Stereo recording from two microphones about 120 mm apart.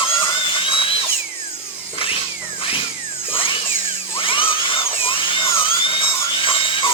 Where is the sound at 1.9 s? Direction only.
50° left (ahead or behind).